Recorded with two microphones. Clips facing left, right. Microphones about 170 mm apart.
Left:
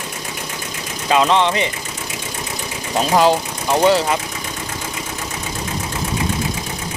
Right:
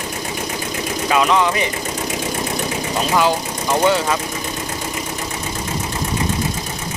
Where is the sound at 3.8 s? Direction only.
30° left (ahead or behind).